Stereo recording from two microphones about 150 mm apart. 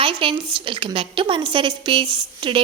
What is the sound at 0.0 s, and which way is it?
Speech, 35° right (ahead or behind).